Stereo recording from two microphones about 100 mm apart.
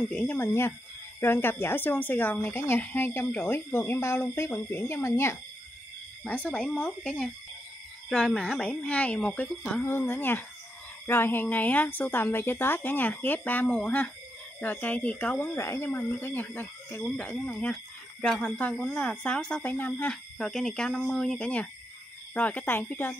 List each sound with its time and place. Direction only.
0.3 s speech: 25° left (ahead or behind)
6.2 s speech: 15° left (ahead or behind)
9.8 s speech: 25° left (ahead or behind)